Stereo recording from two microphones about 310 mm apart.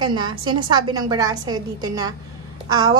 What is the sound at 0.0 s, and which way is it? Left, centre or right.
A woman's voice, centre.